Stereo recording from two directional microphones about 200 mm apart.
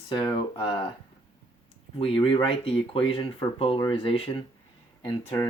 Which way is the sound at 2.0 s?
25° left (ahead or behind).